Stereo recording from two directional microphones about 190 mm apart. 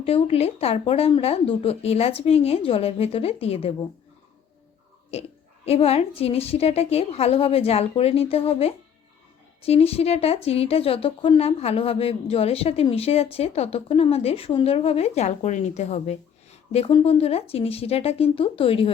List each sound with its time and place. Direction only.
0.0 s speech: 30° left (ahead or behind)
5.6 s speech: 30° left (ahead or behind)